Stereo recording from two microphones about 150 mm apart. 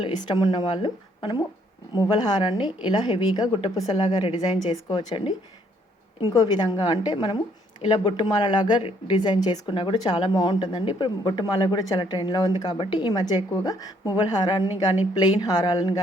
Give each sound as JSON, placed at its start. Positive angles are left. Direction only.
{"t": 0.0, "sound": "a woman's voice", "side_deg": 30}